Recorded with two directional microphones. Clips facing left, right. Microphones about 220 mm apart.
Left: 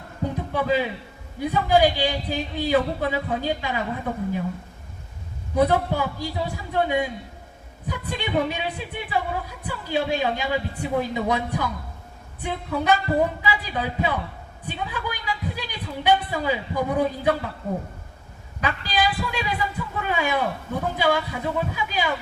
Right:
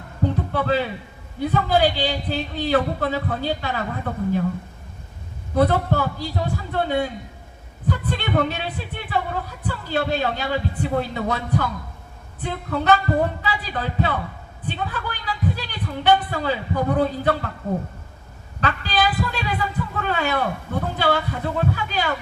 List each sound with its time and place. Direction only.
0.5 s speech: 10° left (ahead or behind)
5.5 s speech: 10° left (ahead or behind)
18.6 s speech: 10° left (ahead or behind)